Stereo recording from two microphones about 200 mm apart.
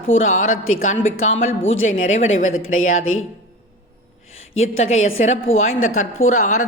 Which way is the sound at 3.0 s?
90° left.